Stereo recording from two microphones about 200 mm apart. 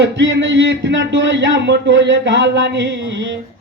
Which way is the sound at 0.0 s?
65° right (ahead or behind).